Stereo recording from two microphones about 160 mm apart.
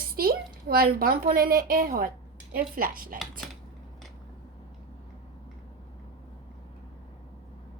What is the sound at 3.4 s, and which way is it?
Cutlery, centre (ahead or behind).